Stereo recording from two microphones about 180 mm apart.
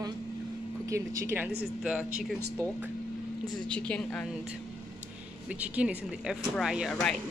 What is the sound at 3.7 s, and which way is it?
Speech, 5° left (ahead or behind).